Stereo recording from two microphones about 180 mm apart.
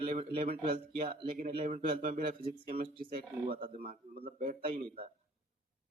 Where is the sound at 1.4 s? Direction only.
35° right (ahead or behind).